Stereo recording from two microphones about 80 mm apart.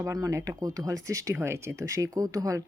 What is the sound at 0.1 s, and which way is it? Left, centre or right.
Speech, right.